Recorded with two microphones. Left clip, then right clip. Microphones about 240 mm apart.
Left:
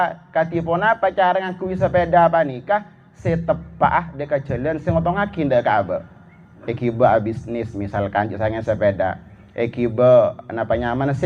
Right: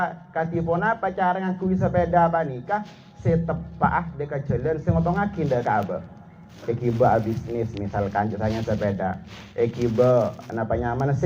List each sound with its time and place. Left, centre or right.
0.0 s a man's voice: left